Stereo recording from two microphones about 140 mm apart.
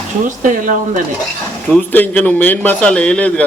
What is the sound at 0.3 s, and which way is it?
Speech, 65° right (ahead or behind).